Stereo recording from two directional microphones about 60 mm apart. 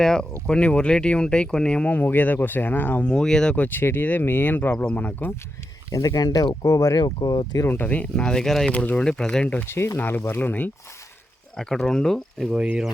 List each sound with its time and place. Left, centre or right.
0.0 s speech: centre
1.9 s speech: left
3.1 s speech: centre
3.5 s speech: left
3.8 s speech: left
5.9 s speech: left
7.7 s speech: left
8.2 s speech: centre
8.7 s speech: left
9.6 s speech: left
10.0 s speech: left
11.5 s speech: centre
12.5 s speech: centre